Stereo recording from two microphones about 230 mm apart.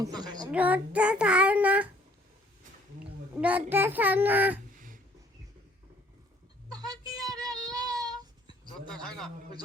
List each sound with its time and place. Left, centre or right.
0.0 s a sound: centre
0.5 s child singing: centre
3.0 s a child's voice: centre
6.7 s a sound: centre
7.4 s child singing: centre
7.7 s child singing: centre
8.9 s child singing: centre